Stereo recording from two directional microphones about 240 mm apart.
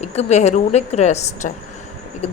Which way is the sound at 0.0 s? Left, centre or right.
Left.